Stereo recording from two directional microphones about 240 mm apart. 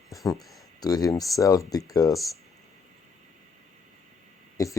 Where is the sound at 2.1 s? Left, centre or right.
Centre.